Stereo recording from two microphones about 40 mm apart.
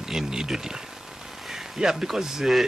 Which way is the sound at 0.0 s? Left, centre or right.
Centre.